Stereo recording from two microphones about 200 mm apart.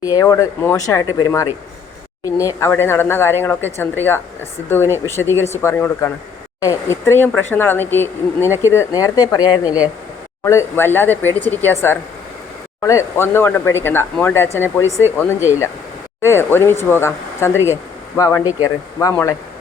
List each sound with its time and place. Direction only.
0.0 s speech: 15° left (ahead or behind)
9.6 s speech: 5° right (ahead or behind)
10.4 s speech: 15° left (ahead or behind)